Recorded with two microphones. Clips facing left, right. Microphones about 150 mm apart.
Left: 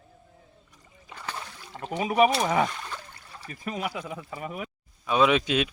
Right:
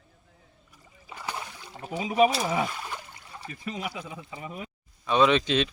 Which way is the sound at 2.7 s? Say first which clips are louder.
Right 1 dB; 10° right (ahead or behind).